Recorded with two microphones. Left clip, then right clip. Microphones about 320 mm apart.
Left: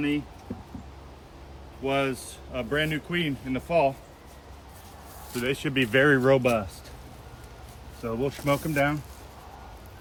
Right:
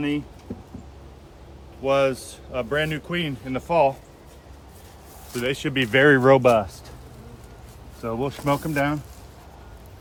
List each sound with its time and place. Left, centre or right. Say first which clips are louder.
1.8 s speech: right 6 dB; centre
5.3 s speech: right 3 dB; right
8.0 s speech: right 2 dB; centre